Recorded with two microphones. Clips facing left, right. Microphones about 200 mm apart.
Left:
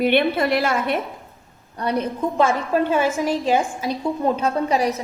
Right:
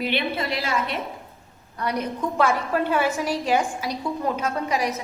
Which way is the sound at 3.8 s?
30° left (ahead or behind).